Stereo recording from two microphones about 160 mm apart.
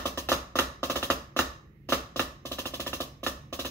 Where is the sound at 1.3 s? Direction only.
15° left (ahead or behind).